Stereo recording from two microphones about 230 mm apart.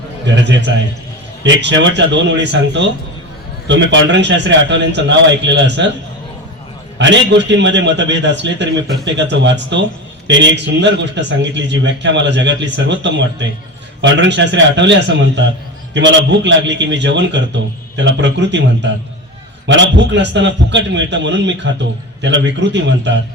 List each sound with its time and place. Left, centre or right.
0.3 s a man's voice: right
7.0 s a man's voice: right